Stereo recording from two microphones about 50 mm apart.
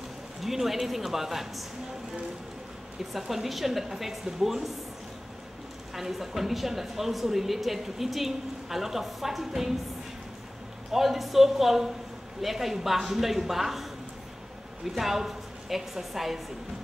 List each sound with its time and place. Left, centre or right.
0.4 s speech: centre
3.1 s speech: centre
5.9 s speech: centre
10.9 s speech: centre
15.0 s a woman's voice: centre